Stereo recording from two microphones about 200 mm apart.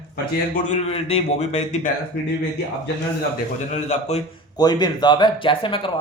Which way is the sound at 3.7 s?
35° left (ahead or behind).